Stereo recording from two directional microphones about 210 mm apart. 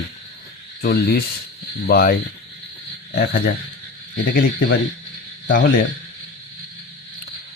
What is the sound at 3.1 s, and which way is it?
Speech, 50° left (ahead or behind).